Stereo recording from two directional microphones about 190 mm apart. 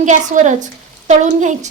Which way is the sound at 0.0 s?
40° right (ahead or behind).